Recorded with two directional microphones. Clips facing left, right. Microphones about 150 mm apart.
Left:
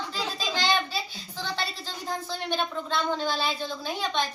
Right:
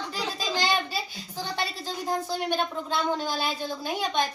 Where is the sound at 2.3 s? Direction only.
10° right (ahead or behind).